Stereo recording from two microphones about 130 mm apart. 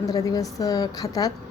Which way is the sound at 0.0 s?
25° left (ahead or behind).